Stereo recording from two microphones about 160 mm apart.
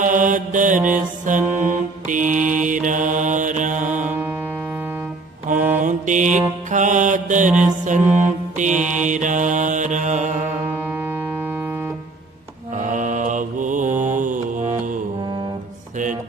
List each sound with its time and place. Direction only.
0.0 s mantra: 55° right (ahead or behind)
5.5 s mantra: 10° right (ahead or behind)
5.8 s mantra: 50° right (ahead or behind)
6.7 s music: 50° right (ahead or behind)
7.9 s mantra: 50° right (ahead or behind)
10.8 s music: 15° right (ahead or behind)
12.7 s mantra: 50° right (ahead or behind)